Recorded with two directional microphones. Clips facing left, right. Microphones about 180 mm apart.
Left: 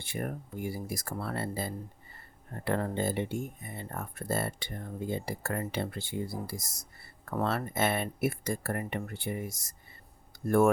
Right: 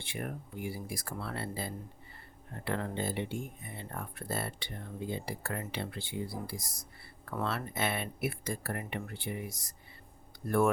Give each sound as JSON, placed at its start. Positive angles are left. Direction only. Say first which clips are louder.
{"t": 0.0, "sound": "speech", "louder": "left 3 dB", "side_deg": 40}